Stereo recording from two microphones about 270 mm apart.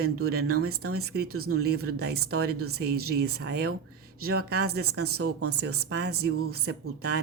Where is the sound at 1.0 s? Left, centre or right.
Right.